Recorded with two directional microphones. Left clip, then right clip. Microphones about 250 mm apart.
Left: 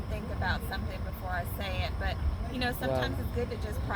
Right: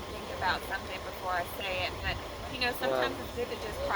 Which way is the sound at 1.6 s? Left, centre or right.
Left.